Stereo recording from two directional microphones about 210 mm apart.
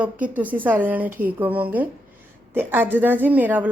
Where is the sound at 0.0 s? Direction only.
5° right (ahead or behind).